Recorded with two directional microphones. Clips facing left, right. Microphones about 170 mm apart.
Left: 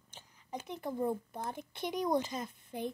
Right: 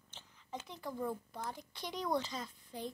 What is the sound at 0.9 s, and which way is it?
A child's voice, 25° left (ahead or behind).